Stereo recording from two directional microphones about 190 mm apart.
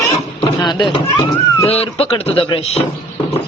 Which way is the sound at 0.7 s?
25° left (ahead or behind).